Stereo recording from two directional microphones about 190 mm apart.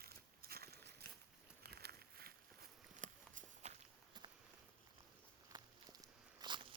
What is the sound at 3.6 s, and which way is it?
Walk, 35° right (ahead or behind).